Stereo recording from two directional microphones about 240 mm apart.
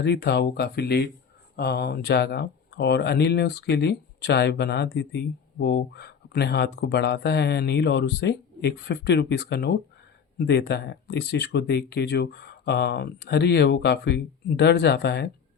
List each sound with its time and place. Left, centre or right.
0.0 s speech: left